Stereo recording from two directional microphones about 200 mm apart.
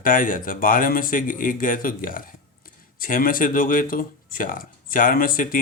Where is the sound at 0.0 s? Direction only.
45° left (ahead or behind).